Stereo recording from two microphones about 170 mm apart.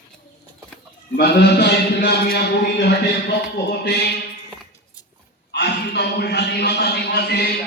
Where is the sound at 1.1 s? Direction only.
80° left.